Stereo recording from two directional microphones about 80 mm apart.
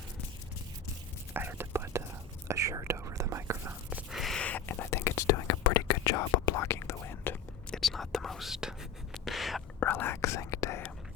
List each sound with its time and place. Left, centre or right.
1.3 s whispering: right
4.1 s a sound: centre
4.4 s whispering: centre; by 6.5 s left
6.5 s whispering: left
7.7 s whispering: centre
9.8 s whispering: left
10.2 s whispering: left